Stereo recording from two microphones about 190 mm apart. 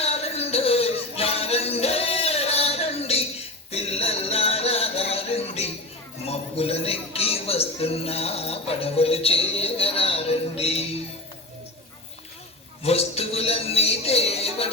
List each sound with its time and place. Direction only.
0.0 s music: 30° left (ahead or behind)
6.2 s a sound: 30° left (ahead or behind)
12.8 s music: 30° left (ahead or behind)